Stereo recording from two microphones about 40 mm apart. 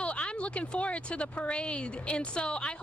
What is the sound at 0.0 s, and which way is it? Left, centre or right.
Speech, left.